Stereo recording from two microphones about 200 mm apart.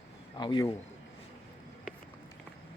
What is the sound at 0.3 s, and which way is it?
Speech, 20° left (ahead or behind).